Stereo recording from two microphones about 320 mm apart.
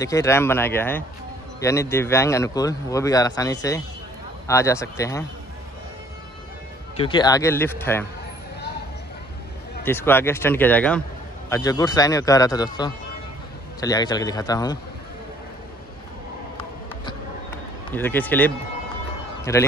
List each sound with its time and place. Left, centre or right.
0.0 s speech: centre
7.0 s speech: centre
9.8 s speech: centre
17.0 s a sound: centre
19.5 s speech: centre